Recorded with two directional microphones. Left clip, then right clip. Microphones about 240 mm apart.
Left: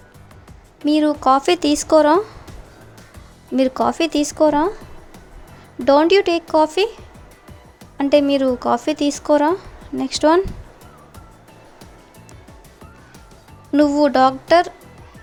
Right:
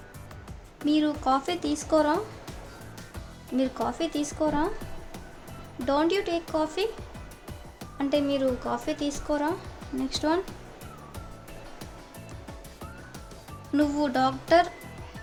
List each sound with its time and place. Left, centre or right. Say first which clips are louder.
0.9 s speech: left 10 dB; left
3.5 s speech: left 11 dB; left
5.8 s speech: left 12 dB; left
7.9 s speech: left 11 dB; left
13.7 s speech: left 11 dB; left